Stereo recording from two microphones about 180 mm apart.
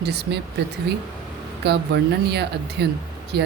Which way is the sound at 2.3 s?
65° right (ahead or behind).